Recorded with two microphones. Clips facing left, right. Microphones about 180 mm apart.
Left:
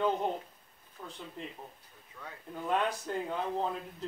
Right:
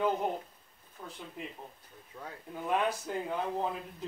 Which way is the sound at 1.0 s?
Centre (ahead or behind).